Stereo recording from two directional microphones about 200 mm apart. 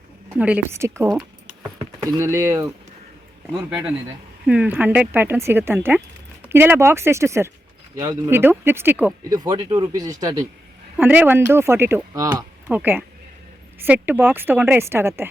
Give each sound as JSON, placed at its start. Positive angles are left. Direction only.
{"t": 0.3, "sound": "speech", "side_deg": -5}
{"t": 3.7, "sound": "speech", "side_deg": -5}